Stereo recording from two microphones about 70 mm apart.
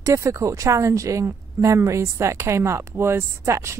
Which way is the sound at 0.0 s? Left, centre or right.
Right.